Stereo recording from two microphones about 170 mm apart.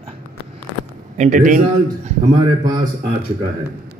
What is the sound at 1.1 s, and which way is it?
Speech, 45° right (ahead or behind).